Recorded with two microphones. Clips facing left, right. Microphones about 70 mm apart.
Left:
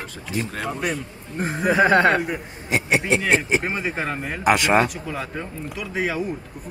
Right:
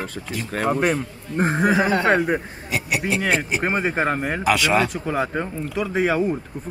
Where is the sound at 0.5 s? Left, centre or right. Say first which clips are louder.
Right 11 dB; right.